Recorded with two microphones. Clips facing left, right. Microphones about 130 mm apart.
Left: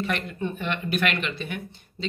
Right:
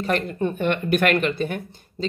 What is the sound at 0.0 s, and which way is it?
Speech, 40° right (ahead or behind).